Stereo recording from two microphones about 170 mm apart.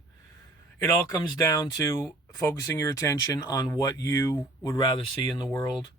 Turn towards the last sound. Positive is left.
turn(degrees=20)  # may be behind; listen again after turning